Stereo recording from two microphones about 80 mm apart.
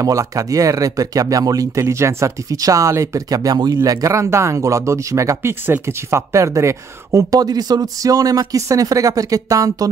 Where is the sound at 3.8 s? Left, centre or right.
Right.